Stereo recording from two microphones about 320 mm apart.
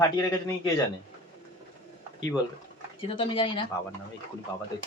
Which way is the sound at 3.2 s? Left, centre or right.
Centre.